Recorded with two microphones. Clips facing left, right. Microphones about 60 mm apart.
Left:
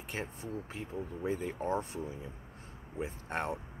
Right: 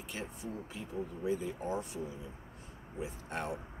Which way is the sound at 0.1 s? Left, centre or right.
Left.